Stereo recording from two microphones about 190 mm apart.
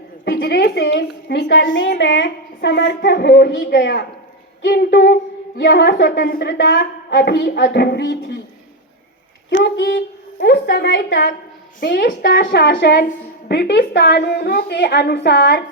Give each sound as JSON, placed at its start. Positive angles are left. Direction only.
{"t": 0.3, "sound": "a woman's voice", "side_deg": 60}
{"t": 9.6, "sound": "a woman's voice", "side_deg": 65}